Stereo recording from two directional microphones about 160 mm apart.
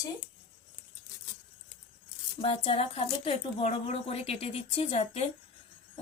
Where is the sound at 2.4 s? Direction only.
35° left (ahead or behind).